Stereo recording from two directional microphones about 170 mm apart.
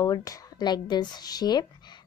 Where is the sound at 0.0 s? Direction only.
20° left (ahead or behind).